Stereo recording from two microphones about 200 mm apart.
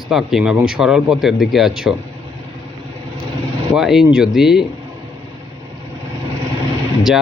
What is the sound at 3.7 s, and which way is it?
Speech, centre (ahead or behind).